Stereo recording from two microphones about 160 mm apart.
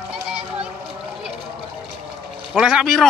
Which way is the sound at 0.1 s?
5° right (ahead or behind).